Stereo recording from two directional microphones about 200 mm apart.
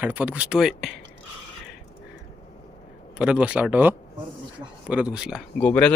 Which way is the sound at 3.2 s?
5° right (ahead or behind).